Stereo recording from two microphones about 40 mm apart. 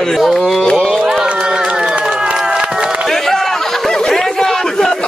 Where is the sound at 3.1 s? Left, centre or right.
Centre.